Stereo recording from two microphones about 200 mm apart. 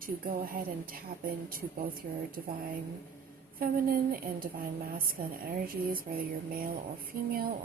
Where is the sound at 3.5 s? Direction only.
45° right (ahead or behind).